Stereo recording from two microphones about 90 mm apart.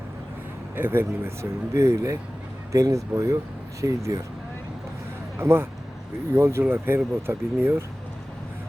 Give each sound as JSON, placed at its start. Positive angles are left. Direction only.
{"t": 0.8, "sound": "speech", "side_deg": -25}
{"t": 5.4, "sound": "speech", "side_deg": -25}